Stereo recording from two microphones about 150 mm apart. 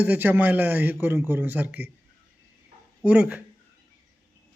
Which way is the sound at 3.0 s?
10° right (ahead or behind).